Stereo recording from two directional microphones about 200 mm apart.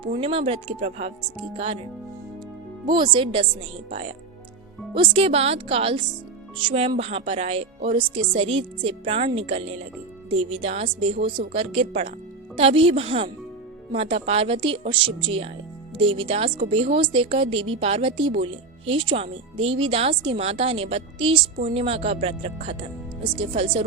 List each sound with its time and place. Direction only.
0.0 s speech: 30° right (ahead or behind)
2.8 s speech: 20° right (ahead or behind)